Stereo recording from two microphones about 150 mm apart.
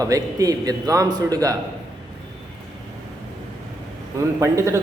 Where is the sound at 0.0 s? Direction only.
25° right (ahead or behind).